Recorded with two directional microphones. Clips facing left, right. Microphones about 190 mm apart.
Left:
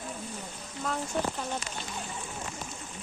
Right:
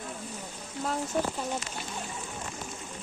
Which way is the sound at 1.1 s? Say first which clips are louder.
Right 1 dB; 5° right (ahead or behind).